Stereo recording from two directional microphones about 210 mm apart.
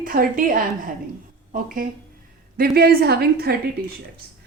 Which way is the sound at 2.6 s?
45° right (ahead or behind).